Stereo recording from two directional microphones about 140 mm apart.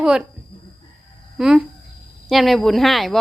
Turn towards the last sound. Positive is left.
turn(degrees=0)  # may be behind; listen again after turning